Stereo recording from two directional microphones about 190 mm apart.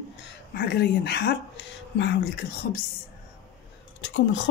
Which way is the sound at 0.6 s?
60° left (ahead or behind).